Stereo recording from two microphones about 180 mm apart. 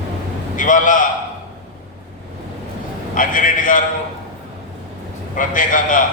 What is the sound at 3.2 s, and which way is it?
Speech, 50° left (ahead or behind).